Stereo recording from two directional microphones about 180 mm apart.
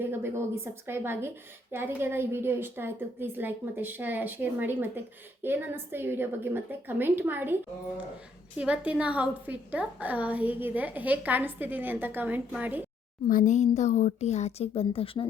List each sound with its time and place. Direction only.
0.0 s a woman's voice: 10° right (ahead or behind)
13.2 s speech: 45° left (ahead or behind)